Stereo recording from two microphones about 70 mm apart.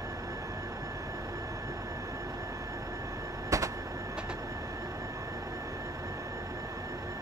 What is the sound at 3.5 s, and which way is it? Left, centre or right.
Vehicle, right.